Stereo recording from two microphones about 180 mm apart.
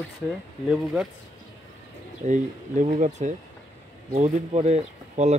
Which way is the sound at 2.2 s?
45° right (ahead or behind).